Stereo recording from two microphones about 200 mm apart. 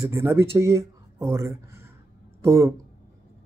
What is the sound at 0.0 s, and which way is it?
Speech, 15° right (ahead or behind).